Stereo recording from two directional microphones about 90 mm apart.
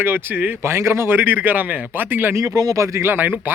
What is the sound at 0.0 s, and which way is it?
A man's voice, 20° right (ahead or behind).